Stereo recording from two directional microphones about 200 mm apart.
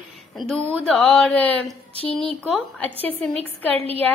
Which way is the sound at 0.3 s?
Centre (ahead or behind).